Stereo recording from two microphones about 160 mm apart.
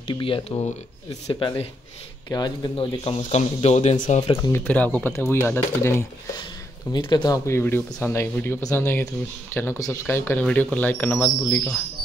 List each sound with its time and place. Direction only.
0.0 s speech: 30° left (ahead or behind)
1.2 s speech: 25° left (ahead or behind); by 4.4 s 45° left (ahead or behind)
4.4 s speech: 15° left (ahead or behind)
6.9 s speech: 30° left (ahead or behind); by 11.8 s 10° left (ahead or behind)